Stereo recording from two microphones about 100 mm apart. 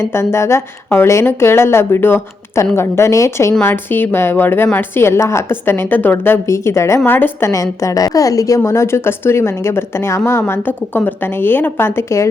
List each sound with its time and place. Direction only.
0.0 s a woman's voice: 25° left (ahead or behind)
7.5 s a woman's voice: 35° left (ahead or behind)